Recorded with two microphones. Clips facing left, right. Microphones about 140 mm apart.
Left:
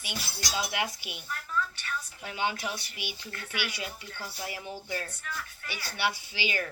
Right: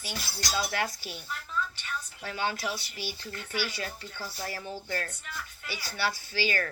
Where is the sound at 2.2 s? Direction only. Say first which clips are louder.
Even; 15° left (ahead or behind).